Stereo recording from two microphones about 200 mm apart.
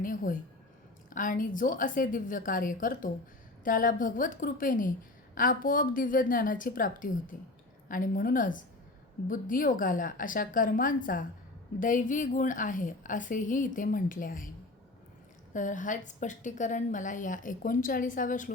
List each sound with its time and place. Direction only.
0.0 s a sound: 40° left (ahead or behind)
1.1 s a woman's voice: 40° left (ahead or behind)
15.5 s a woman's voice: 40° left (ahead or behind)